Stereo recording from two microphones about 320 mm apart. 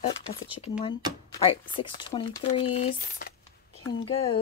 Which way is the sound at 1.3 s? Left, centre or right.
Centre.